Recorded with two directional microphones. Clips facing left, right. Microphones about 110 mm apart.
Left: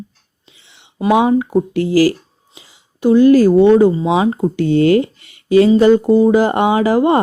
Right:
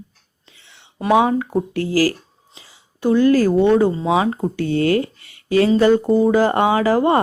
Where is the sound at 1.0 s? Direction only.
15° left (ahead or behind).